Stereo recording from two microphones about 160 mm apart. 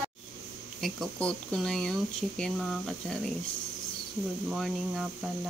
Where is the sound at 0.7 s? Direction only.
Centre (ahead or behind).